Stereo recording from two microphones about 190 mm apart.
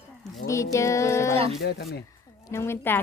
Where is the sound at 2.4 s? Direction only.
15° left (ahead or behind).